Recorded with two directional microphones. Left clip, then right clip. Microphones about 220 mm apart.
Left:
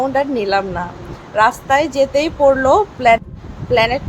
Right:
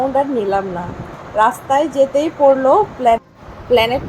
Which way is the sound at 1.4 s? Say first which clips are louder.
Left 1 dB; 15° right (ahead or behind).